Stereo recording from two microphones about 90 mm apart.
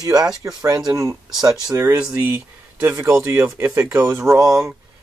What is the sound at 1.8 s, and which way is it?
Speech, 30° right (ahead or behind).